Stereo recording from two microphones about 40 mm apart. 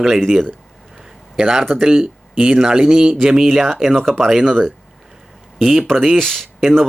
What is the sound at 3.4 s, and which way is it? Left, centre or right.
Speech, centre.